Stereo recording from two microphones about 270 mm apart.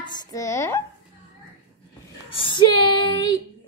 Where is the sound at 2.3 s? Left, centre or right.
Centre.